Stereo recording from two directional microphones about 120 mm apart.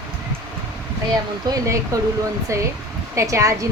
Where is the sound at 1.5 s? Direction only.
30° right (ahead or behind).